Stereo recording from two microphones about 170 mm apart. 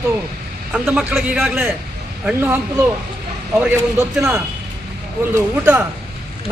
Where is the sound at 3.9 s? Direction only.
15° right (ahead or behind).